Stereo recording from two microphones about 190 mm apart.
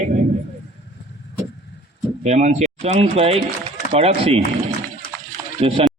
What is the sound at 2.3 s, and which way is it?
Speech, 35° right (ahead or behind).